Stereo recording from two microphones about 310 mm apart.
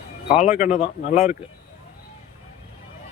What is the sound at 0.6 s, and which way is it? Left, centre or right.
Speech, left.